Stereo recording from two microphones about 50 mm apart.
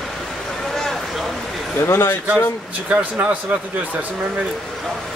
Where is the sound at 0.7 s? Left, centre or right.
Centre.